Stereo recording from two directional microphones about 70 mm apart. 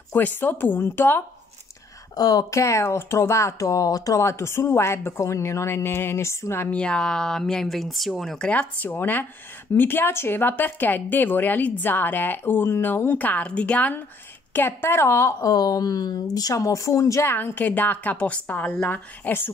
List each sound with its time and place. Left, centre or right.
0.1 s a woman's voice: left
2.1 s speech: left
6.7 s speech: centre
8.4 s a woman's voice: left
15.4 s speech: left
17.3 s a woman's voice: left